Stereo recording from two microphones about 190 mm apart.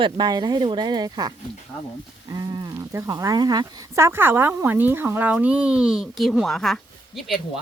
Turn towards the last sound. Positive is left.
turn(degrees=0)  # may be behind; listen again after turning